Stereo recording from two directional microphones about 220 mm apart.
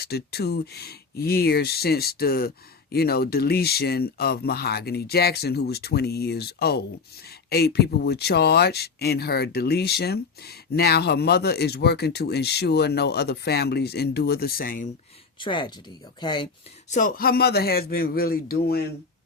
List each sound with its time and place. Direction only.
0.0 s speech: 45° left (ahead or behind)
15.4 s speech: 20° left (ahead or behind)
16.9 s speech: 40° left (ahead or behind)